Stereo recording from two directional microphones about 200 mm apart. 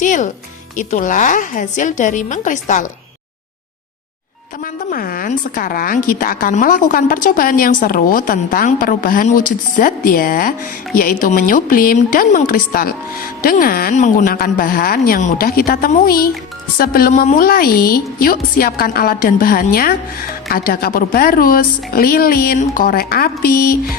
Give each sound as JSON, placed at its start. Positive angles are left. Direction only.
{"t": 0.0, "sound": "a woman's voice", "side_deg": 40}
{"t": 4.6, "sound": "a woman's voice", "side_deg": 45}